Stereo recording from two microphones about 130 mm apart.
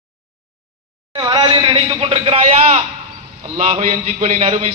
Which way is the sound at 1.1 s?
30° right (ahead or behind).